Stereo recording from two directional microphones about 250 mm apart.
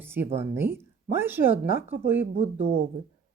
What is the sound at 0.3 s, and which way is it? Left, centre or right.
A woman's voice, centre.